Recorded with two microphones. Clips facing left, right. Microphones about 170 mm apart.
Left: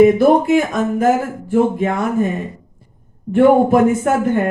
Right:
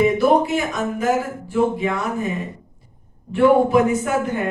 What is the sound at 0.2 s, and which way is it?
A man's voice, 50° left (ahead or behind).